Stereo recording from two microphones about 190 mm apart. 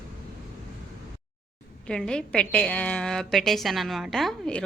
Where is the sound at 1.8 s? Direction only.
5° left (ahead or behind).